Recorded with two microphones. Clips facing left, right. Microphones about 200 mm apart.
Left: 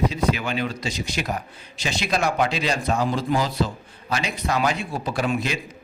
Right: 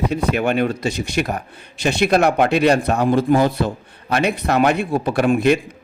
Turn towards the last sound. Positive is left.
turn(degrees=-55)  # may be behind; listen again after turning